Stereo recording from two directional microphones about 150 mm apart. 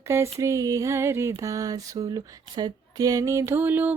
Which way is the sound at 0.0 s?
20° right (ahead or behind).